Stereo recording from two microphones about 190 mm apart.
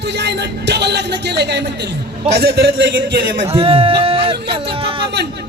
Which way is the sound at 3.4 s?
30° right (ahead or behind).